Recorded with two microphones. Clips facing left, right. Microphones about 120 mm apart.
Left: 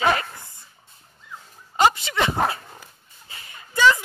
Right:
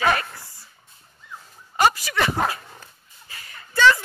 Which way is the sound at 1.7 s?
20° left (ahead or behind).